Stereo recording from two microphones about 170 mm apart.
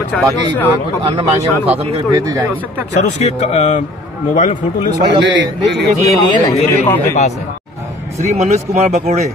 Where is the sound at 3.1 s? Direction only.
40° left (ahead or behind).